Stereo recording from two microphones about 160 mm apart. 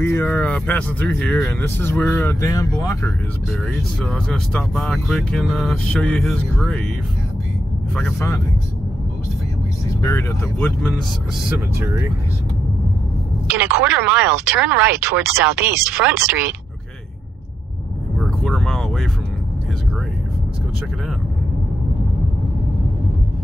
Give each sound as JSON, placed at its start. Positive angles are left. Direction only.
{"t": 0.0, "sound": "speech", "side_deg": 15}
{"t": 3.7, "sound": "speech", "side_deg": 5}
{"t": 9.8, "sound": "speech", "side_deg": 20}
{"t": 11.4, "sound": "speech", "side_deg": -15}
{"t": 13.5, "sound": "speech", "side_deg": -15}
{"t": 18.2, "sound": "vehicle", "side_deg": 0}